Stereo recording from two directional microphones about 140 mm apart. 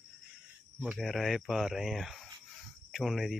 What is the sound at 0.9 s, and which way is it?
Speech, centre (ahead or behind).